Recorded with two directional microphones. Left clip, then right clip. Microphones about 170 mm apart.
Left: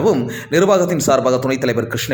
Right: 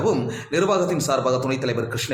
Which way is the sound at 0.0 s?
25° left (ahead or behind).